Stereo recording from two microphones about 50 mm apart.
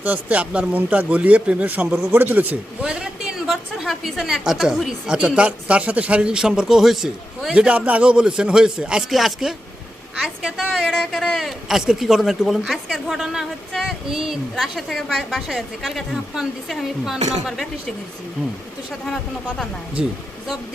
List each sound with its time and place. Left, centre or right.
0.0 s a man's voice: right
2.8 s a sound: centre
3.3 s a sound: centre
4.2 s speech: centre
5.0 s a man's voice: centre
7.5 s a man's voice: right; by 9.6 s centre
10.7 s a woman's voice: centre
19.0 s a woman's voice: centre
20.0 s speech: centre